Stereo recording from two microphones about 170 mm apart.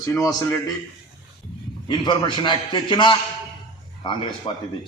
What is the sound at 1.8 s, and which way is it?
A man's voice, 30° left (ahead or behind).